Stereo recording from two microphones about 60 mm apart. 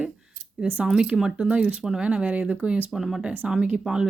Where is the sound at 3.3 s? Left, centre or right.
Centre.